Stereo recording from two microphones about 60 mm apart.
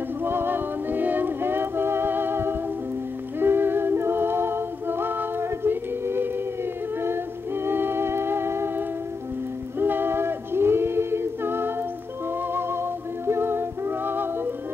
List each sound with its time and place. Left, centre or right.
0.2 s music: right
9.8 s a sound: right
12.5 s music: right